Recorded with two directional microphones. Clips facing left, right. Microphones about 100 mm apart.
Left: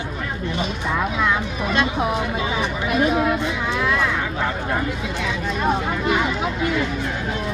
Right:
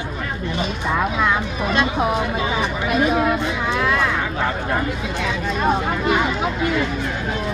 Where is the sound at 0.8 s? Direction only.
45° right (ahead or behind).